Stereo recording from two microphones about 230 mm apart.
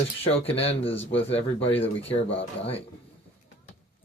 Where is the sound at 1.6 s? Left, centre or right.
Centre.